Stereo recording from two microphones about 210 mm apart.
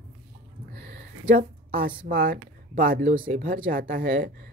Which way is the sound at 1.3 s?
45° right (ahead or behind).